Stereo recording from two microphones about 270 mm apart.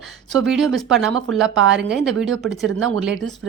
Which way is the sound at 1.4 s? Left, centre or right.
Right.